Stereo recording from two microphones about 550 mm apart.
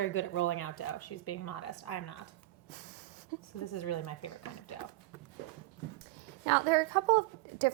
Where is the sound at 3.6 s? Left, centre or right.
Left.